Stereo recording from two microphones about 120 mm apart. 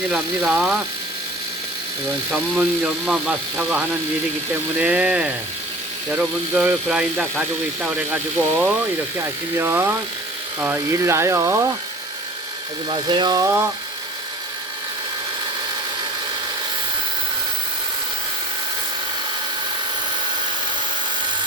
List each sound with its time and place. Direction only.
0.1 s speech: 5° right (ahead or behind)
2.3 s speech: 5° right (ahead or behind); by 9.9 s 20° right (ahead or behind)
10.9 s speech: 25° right (ahead or behind)
12.9 s speech: 40° right (ahead or behind)
13.4 s speech: 20° right (ahead or behind)